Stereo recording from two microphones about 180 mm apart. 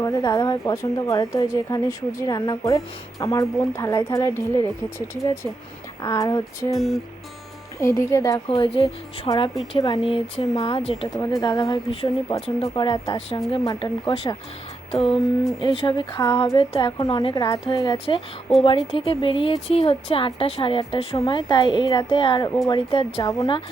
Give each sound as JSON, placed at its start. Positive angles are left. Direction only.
{"t": 0.0, "sound": "a woman's voice", "side_deg": 20}
{"t": 6.0, "sound": "speech", "side_deg": 20}
{"t": 6.7, "sound": "music", "side_deg": 0}
{"t": 7.8, "sound": "a woman's voice", "side_deg": 15}
{"t": 8.4, "sound": "speech", "side_deg": 30}
{"t": 11.2, "sound": "speech", "side_deg": 20}
{"t": 23.2, "sound": "speech", "side_deg": 20}